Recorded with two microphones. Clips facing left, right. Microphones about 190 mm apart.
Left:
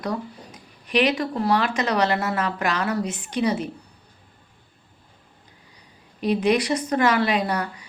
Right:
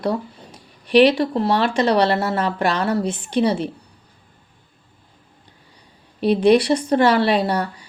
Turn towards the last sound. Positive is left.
turn(degrees=-30)  # may be behind; listen again after turning